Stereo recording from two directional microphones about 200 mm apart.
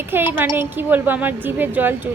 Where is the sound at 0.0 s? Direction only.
10° right (ahead or behind).